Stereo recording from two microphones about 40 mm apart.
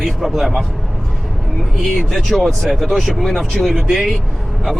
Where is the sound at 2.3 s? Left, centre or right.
Centre.